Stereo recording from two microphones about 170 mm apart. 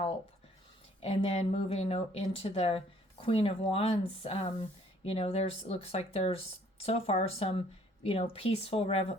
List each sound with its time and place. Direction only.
1.0 s speech: 40° left (ahead or behind)